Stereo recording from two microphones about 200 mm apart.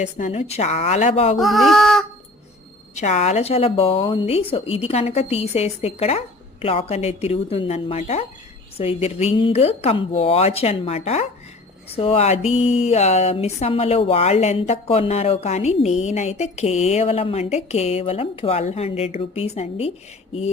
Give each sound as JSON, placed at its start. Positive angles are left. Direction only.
{"t": 0.0, "sound": "speech", "side_deg": 35}
{"t": 1.4, "sound": "speech", "side_deg": 0}
{"t": 2.9, "sound": "speech", "side_deg": 35}